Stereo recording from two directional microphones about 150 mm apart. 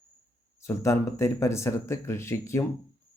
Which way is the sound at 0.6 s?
20° left (ahead or behind).